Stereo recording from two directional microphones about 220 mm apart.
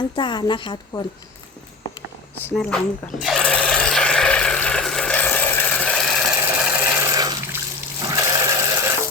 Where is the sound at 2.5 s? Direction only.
5° left (ahead or behind).